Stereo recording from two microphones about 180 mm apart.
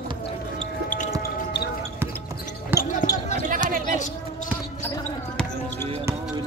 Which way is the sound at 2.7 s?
50° left (ahead or behind).